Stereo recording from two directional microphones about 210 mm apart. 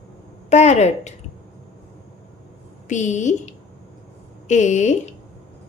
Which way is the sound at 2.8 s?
35° left (ahead or behind).